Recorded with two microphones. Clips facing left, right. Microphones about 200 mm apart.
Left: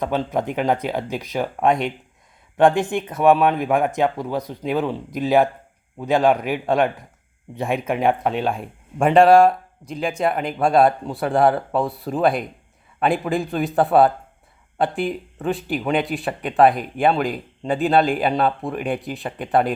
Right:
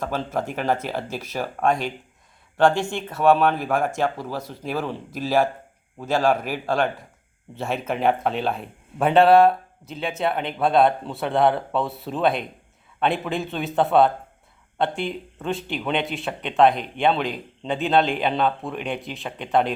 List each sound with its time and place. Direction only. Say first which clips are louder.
0.0 s speech: left 4 dB; 20° left (ahead or behind)
3.1 s speech: left 1 dB; 15° left (ahead or behind)
9.0 s speech: left 2 dB; centre (ahead or behind)